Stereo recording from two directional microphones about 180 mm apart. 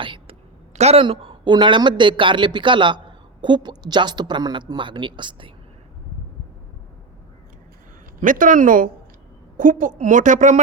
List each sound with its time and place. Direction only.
0.0 s a woman's voice: 30° right (ahead or behind)
8.2 s a woman's voice: 45° right (ahead or behind)